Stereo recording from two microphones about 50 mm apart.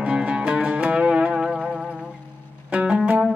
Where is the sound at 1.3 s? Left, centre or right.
Centre.